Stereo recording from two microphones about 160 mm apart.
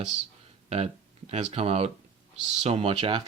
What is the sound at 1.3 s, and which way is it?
Speech, 40° right (ahead or behind).